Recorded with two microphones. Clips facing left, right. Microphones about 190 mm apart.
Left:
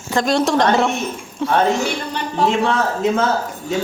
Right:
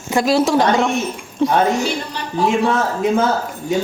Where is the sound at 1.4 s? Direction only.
15° right (ahead or behind).